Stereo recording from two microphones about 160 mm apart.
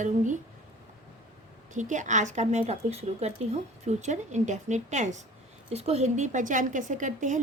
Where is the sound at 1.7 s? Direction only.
50° right (ahead or behind).